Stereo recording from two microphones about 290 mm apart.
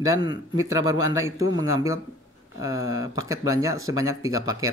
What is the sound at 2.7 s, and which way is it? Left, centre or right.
Speech, left.